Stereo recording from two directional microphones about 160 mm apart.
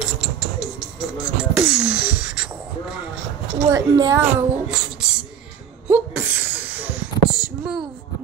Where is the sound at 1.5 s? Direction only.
5° right (ahead or behind).